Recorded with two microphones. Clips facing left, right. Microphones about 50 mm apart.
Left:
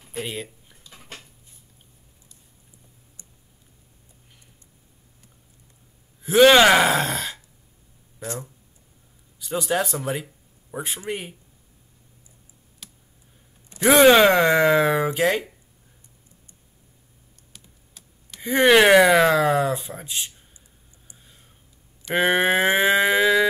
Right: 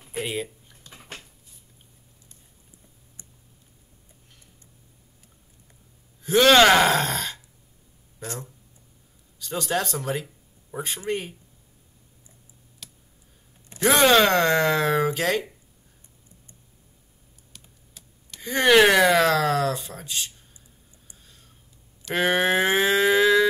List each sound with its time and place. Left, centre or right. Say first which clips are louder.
0.1 s a sound: right 2 dB; centre
6.2 s speech: left 2 dB; centre
9.4 s speech: left 3 dB; centre
12.8 s clicking: even; centre
13.7 s speech: left 4 dB; centre
17.9 s speech: left 1 dB; centre
21.2 s a sound: left 1 dB; centre
22.1 s speech: left 2 dB; centre